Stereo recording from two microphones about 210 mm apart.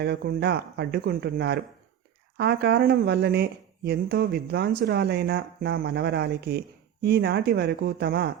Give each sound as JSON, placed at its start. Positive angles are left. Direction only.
{"t": 0.0, "sound": "speech", "side_deg": -50}